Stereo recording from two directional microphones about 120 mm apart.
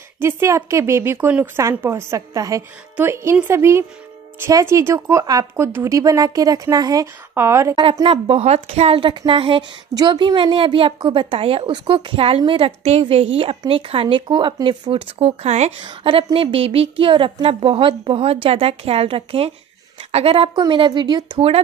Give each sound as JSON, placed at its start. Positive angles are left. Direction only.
{"t": 0.2, "sound": "speech", "side_deg": -20}
{"t": 8.0, "sound": "speech", "side_deg": -50}
{"t": 11.7, "sound": "speech", "side_deg": -40}
{"t": 15.8, "sound": "speech", "side_deg": -45}